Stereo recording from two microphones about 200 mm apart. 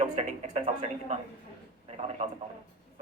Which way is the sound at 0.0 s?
35° right (ahead or behind).